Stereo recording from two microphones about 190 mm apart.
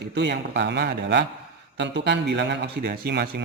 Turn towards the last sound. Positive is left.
turn(degrees=-60)  # may be behind; listen again after turning